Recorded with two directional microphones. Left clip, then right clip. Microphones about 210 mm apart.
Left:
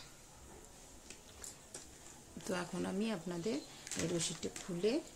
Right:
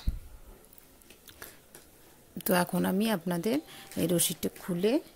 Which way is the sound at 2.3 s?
45° right (ahead or behind).